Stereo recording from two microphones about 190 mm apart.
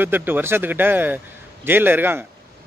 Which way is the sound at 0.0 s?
10° right (ahead or behind).